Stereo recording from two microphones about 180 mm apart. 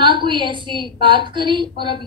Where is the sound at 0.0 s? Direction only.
25° right (ahead or behind).